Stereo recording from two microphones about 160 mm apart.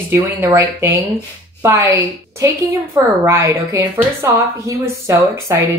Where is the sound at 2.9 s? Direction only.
15° right (ahead or behind).